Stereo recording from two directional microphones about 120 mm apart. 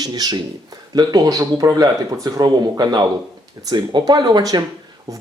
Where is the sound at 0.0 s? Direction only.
35° right (ahead or behind).